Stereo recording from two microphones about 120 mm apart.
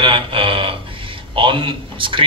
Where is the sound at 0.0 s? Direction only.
45° right (ahead or behind).